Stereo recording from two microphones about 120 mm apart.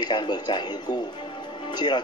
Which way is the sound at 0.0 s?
40° left (ahead or behind).